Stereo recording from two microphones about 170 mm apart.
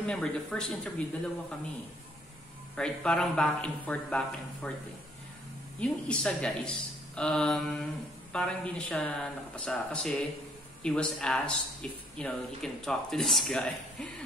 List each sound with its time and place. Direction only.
0.0 s speech: 5° left (ahead or behind)
2.7 s speech: 5° left (ahead or behind)
5.8 s speech: 5° left (ahead or behind)